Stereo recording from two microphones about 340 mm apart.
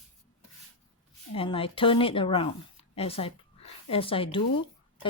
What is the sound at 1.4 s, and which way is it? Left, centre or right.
Speech, centre.